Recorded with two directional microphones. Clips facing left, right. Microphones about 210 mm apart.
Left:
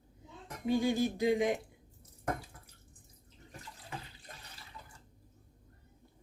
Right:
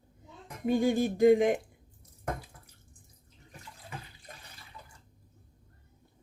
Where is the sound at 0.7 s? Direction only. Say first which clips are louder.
Right 3 dB; 50° right (ahead or behind).